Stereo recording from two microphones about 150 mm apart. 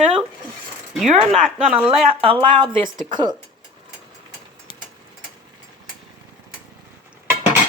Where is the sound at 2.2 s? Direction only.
35° right (ahead or behind).